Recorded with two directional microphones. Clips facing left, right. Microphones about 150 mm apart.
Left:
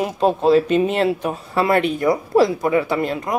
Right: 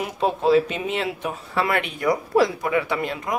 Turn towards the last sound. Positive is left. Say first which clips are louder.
# left 4 dB
turn(degrees=35)  # may be behind; listen again after turning